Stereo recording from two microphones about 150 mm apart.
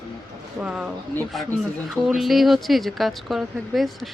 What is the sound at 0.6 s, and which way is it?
Speech, 5° right (ahead or behind).